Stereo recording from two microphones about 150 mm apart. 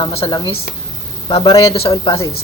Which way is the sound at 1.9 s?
30° left (ahead or behind).